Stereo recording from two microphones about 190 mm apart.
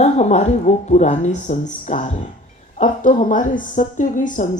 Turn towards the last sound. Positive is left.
turn(degrees=40)  # may be behind; listen again after turning